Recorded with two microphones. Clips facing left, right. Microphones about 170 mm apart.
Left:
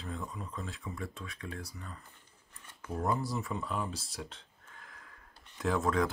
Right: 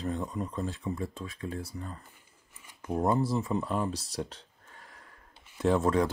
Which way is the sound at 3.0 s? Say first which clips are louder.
Right 6 dB; 25° right (ahead or behind).